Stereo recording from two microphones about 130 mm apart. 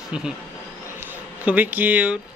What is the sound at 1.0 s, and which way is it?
Speech, 10° right (ahead or behind).